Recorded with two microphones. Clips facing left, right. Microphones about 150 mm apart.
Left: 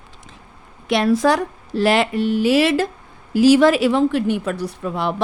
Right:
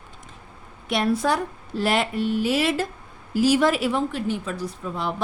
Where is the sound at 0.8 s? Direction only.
90° left; by 5.1 s 70° left (ahead or behind).